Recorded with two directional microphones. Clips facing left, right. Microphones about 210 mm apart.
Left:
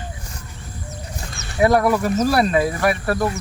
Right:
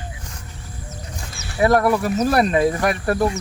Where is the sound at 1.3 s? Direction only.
5° right (ahead or behind).